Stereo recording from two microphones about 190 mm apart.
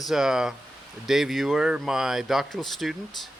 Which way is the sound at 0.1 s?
5° right (ahead or behind).